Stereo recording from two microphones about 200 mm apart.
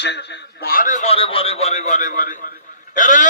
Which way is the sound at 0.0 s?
60° left (ahead or behind).